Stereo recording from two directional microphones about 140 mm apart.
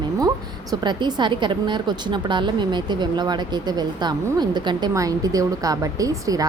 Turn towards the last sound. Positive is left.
turn(degrees=-25)  # may be behind; listen again after turning